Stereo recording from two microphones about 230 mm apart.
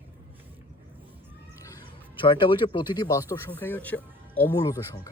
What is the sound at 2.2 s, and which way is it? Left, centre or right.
Speech, left.